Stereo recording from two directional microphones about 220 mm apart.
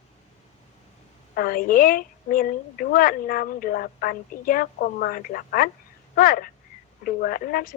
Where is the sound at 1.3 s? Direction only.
40° left (ahead or behind).